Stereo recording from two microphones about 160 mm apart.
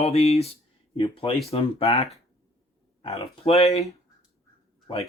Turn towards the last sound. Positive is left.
turn(degrees=30)  # may be behind; listen again after turning